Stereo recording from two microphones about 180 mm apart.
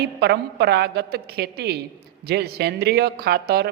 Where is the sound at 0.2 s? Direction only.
65° right (ahead or behind).